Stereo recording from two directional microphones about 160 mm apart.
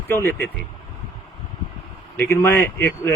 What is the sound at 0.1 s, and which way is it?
Speech, 15° left (ahead or behind).